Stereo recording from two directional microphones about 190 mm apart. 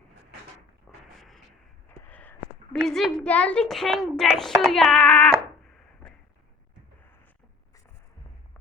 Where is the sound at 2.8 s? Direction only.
Centre (ahead or behind).